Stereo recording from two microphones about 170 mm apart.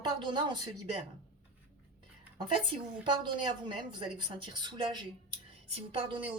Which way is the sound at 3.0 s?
30° right (ahead or behind).